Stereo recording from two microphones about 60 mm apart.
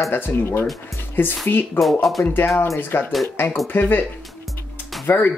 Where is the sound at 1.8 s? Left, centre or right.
Centre.